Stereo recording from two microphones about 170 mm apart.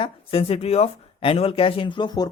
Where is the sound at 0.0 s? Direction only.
35° left (ahead or behind).